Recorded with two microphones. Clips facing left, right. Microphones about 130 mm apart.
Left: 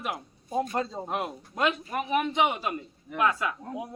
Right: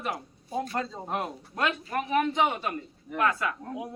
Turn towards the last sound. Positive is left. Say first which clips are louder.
# left 1 dB
turn(degrees=10)  # may be behind; listen again after turning